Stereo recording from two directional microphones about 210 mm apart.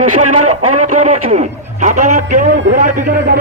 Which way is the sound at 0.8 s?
35° right (ahead or behind).